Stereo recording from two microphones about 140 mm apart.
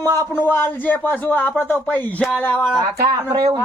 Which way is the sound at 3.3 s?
25° right (ahead or behind).